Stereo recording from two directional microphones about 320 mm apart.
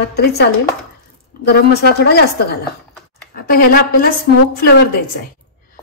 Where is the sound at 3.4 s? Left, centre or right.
Left.